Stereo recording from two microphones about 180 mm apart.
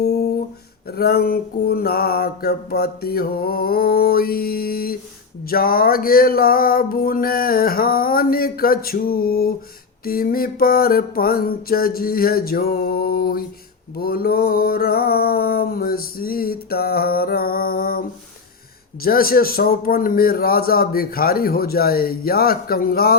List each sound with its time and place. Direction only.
0.9 s mantra: 60° left (ahead or behind)
19.0 s mantra: 55° left (ahead or behind)